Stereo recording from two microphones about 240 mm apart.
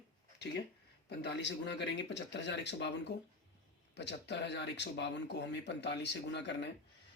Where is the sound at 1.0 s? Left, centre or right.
Left.